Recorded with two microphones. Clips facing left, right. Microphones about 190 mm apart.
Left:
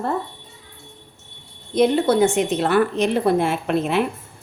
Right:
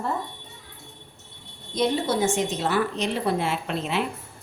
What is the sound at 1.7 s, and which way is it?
A woman's voice, 60° left (ahead or behind).